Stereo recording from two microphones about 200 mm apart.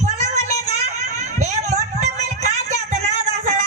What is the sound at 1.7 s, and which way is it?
Music, 35° right (ahead or behind).